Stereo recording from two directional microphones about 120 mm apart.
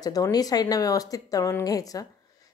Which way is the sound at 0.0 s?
30° left (ahead or behind).